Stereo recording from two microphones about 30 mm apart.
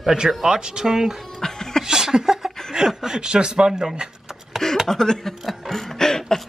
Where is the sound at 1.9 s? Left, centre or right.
Right.